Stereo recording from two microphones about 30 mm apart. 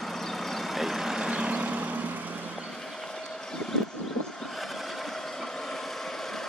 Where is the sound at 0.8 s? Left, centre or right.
Centre.